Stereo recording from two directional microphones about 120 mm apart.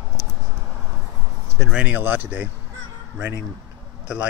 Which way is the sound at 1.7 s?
10° right (ahead or behind).